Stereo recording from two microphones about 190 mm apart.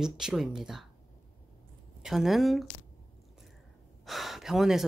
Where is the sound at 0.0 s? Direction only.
Centre (ahead or behind).